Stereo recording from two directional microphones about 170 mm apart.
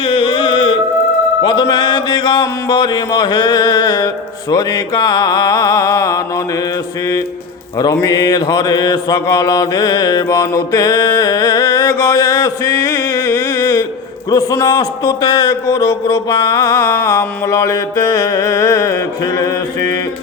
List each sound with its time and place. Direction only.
0.0 s music: 30° left (ahead or behind)
1.4 s mantra: 25° left (ahead or behind)
7.8 s mantra: 20° left (ahead or behind)